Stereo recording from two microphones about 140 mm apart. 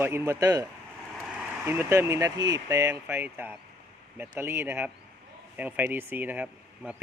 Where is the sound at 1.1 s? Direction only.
Centre (ahead or behind).